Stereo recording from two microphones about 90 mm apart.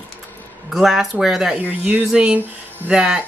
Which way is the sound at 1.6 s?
20° right (ahead or behind).